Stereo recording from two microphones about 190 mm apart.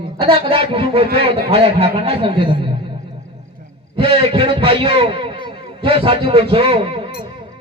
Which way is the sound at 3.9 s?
30° right (ahead or behind).